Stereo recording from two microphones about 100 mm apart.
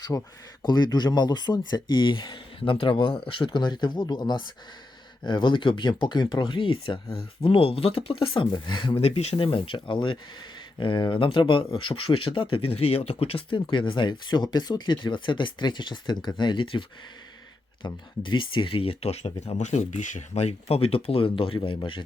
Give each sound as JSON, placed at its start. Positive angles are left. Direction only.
{"t": 0.1, "sound": "speech", "side_deg": 25}
{"t": 0.6, "sound": "speech", "side_deg": 45}
{"t": 9.0, "sound": "speech", "side_deg": 90}
{"t": 17.8, "sound": "speech", "side_deg": 55}